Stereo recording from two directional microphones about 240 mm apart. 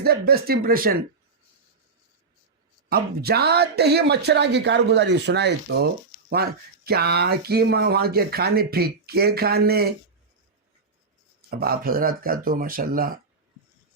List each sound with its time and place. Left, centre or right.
0.0 s speech: right
2.9 s speech: right
11.5 s speech: right